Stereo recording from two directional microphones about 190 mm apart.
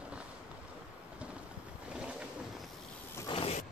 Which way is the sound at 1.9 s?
5° right (ahead or behind).